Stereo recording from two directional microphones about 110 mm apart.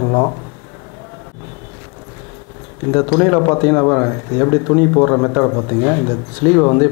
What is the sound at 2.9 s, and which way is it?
Speech, 20° left (ahead or behind).